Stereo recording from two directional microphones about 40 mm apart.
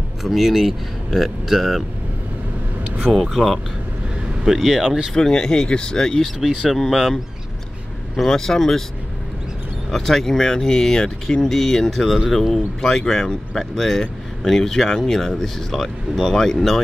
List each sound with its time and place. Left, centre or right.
0.2 s speech: centre
3.2 s speech: centre
5.1 s speech: centre
6.4 s speech: centre
6.8 s speech: centre
8.3 s speech: centre
9.8 s speech: centre